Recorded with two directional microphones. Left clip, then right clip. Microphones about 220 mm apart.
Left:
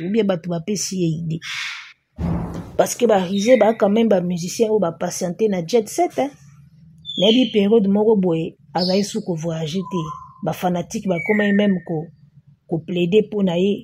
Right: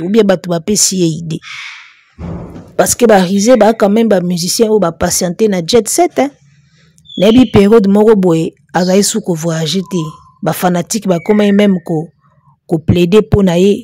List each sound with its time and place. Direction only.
0.0 s speech: 40° right (ahead or behind)
2.7 s a woman's voice: 40° right (ahead or behind)